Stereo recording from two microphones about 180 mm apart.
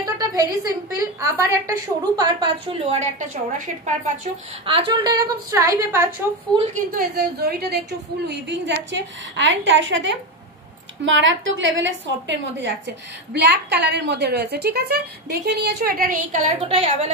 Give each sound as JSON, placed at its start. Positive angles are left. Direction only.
{"t": 0.0, "sound": "a woman's voice", "side_deg": -20}
{"t": 7.0, "sound": "a woman's voice", "side_deg": -60}
{"t": 8.3, "sound": "a woman's voice", "side_deg": -75}
{"t": 9.4, "sound": "a woman's voice", "side_deg": -90}
{"t": 16.6, "sound": "a woman's voice", "side_deg": -35}